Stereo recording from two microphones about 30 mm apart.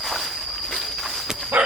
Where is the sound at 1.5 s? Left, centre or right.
Right.